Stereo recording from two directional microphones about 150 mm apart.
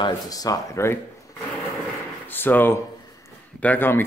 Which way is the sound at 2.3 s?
15° left (ahead or behind).